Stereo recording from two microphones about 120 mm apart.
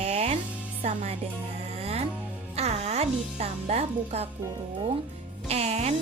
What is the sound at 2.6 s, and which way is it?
Speech, 65° right (ahead or behind).